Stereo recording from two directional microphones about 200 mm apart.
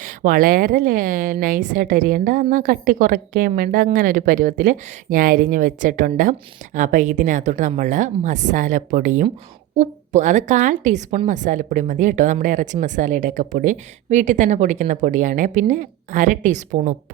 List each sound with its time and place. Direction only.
0.0 s a woman's voice: 45° right (ahead or behind)